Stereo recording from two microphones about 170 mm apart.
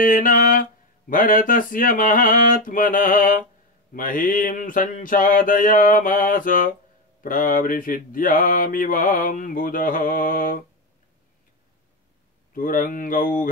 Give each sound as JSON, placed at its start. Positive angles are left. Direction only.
{"t": 0.0, "sound": "mantra", "side_deg": 55}
{"t": 12.5, "sound": "mantra", "side_deg": 55}